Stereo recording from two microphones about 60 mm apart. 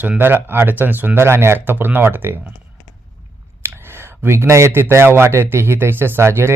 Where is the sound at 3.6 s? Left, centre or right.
Right.